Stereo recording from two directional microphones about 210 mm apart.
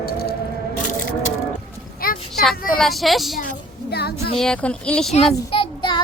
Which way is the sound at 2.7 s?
Centre (ahead or behind).